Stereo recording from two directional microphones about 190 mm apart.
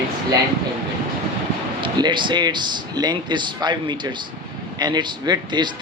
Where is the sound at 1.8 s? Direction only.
25° right (ahead or behind).